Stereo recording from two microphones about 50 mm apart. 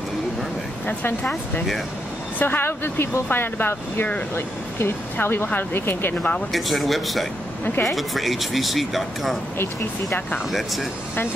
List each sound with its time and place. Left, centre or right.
2.3 s speech: left
5.1 s speech: left
6.5 s speech: centre
10.5 s speech: centre